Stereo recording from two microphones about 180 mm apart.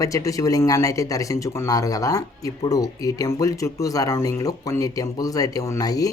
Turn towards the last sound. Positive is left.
turn(degrees=20)  # may be behind; listen again after turning